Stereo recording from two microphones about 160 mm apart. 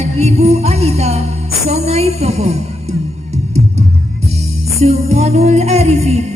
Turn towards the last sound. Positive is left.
turn(degrees=-45)  # may be behind; listen again after turning